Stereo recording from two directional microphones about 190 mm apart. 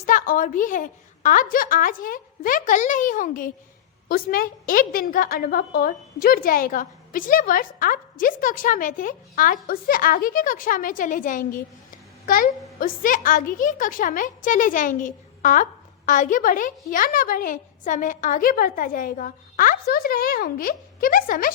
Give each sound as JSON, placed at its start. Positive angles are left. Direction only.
{"t": 0.0, "sound": "a woman's voice", "side_deg": 45}